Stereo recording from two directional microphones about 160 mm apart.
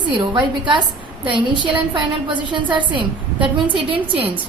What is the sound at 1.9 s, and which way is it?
A woman's voice, 30° right (ahead or behind).